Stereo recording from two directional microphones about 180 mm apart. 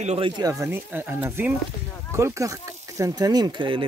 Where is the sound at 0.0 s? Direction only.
40° right (ahead or behind).